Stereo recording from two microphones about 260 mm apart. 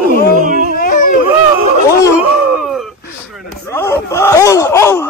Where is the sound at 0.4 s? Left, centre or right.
Right.